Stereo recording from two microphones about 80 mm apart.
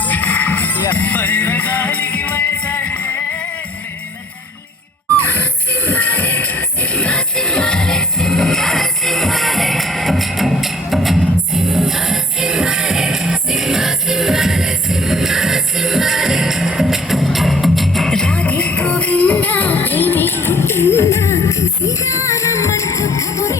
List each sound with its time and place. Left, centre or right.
0.0 s music: centre
5.1 s music: left